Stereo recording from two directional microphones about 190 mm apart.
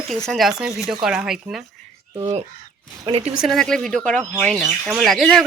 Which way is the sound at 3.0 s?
30° right (ahead or behind).